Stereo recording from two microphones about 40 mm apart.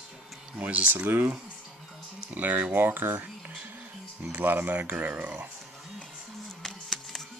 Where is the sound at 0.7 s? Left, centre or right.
Right.